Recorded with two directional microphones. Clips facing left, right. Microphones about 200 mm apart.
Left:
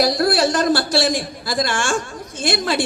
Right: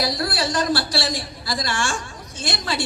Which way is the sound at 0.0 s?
45° left (ahead or behind).